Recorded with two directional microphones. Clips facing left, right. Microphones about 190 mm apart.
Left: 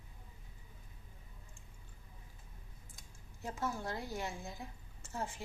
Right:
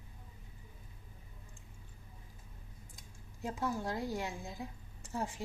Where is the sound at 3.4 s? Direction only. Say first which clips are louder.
Right 3 dB; 15° right (ahead or behind).